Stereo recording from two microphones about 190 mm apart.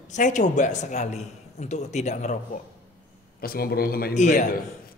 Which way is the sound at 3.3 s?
50° left (ahead or behind).